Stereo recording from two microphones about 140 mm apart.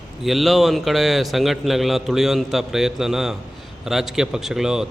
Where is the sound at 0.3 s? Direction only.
Centre (ahead or behind).